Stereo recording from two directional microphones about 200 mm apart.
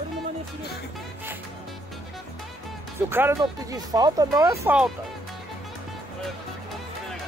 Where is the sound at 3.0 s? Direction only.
10° right (ahead or behind).